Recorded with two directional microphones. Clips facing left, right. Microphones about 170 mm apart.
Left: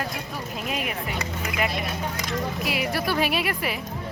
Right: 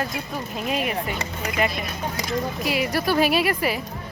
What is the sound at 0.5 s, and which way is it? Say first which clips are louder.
Speech: right 5 dB; centre (ahead or behind).